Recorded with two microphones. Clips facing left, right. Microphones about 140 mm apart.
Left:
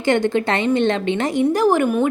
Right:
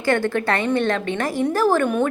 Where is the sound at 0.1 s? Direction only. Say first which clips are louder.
Left 2 dB; 20° left (ahead or behind).